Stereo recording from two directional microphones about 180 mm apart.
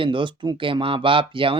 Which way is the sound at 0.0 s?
25° right (ahead or behind).